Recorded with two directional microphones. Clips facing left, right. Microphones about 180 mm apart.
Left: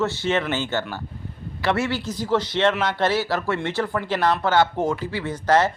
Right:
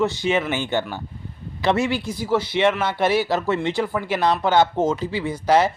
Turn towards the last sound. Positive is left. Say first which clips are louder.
# right 1 dB
turn(degrees=-10)  # may be behind; listen again after turning